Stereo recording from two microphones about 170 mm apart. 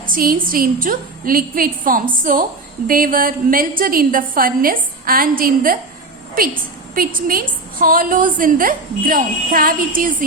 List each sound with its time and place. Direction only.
0.1 s a woman's voice: 55° right (ahead or behind)
6.9 s a woman's voice: 55° right (ahead or behind)